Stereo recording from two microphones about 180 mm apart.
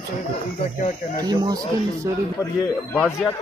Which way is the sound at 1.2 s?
20° right (ahead or behind).